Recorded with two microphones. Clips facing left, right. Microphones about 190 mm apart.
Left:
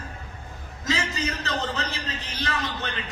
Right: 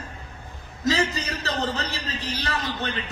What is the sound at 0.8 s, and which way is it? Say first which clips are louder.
A man's voice: right 4 dB; 35° right (ahead or behind).